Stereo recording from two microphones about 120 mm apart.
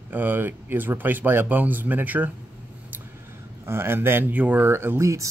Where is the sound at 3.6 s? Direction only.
20° right (ahead or behind).